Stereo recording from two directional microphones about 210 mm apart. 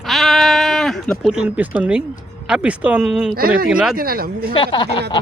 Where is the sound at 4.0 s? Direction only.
45° right (ahead or behind).